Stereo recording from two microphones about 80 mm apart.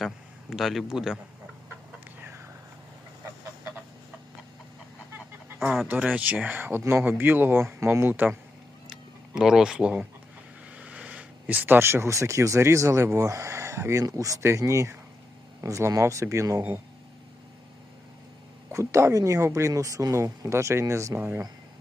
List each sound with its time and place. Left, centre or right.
0.5 s a man's voice: centre
5.5 s a sound: centre
5.9 s speech: centre
8.9 s speech: centre; by 16.8 s right
18.7 s speech: right
21.2 s speech: right